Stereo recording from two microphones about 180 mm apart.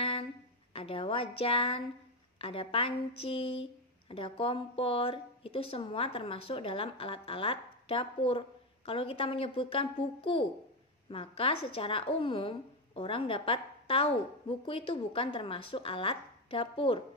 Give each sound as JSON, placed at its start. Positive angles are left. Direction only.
{"t": 0.7, "sound": "a woman's voice", "side_deg": 30}